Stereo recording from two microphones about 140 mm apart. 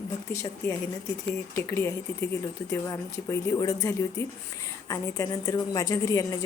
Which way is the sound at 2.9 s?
25° left (ahead or behind).